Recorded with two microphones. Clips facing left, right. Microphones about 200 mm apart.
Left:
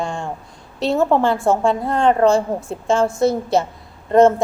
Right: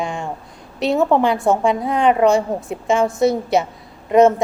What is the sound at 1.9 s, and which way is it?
A woman's voice, 15° right (ahead or behind).